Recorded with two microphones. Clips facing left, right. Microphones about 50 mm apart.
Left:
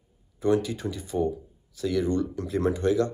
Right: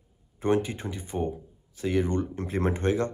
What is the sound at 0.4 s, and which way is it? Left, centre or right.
Speech, right.